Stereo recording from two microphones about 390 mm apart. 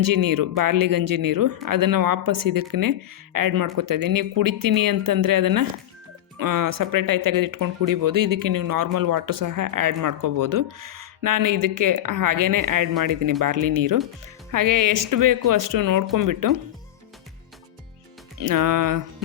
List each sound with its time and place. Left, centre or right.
0.0 s speech: right
18.3 s speech: right